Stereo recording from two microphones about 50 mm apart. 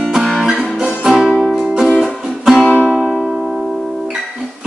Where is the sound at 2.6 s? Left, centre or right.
Left.